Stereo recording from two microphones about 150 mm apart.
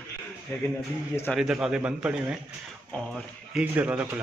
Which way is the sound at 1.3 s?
Centre (ahead or behind).